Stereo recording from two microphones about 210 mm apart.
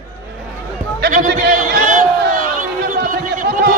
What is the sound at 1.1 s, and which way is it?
Speech, 35° right (ahead or behind).